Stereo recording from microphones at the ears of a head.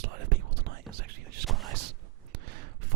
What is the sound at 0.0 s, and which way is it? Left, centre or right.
Whispering, right.